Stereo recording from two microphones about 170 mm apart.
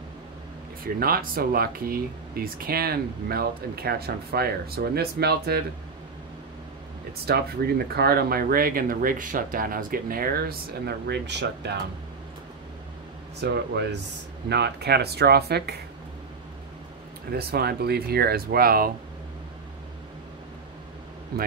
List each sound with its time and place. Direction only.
0.8 s speech: 60° right (ahead or behind)
7.2 s speech: 65° right (ahead or behind); by 11.7 s 90° right
13.4 s speech: 80° right
17.3 s speech: 65° right (ahead or behind)